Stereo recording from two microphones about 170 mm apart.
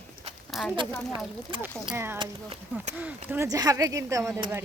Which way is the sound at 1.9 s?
15° right (ahead or behind).